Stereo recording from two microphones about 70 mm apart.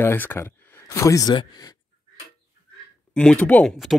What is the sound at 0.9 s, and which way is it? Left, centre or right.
Speech, left.